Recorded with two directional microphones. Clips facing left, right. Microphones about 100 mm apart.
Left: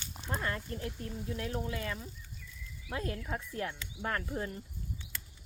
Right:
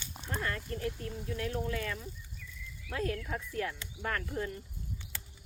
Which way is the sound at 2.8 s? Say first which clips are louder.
Right 2 dB; 20° left (ahead or behind).